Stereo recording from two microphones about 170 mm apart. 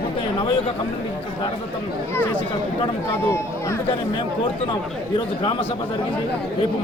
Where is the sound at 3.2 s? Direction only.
15° left (ahead or behind).